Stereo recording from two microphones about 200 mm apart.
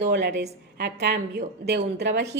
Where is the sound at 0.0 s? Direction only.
55° right (ahead or behind).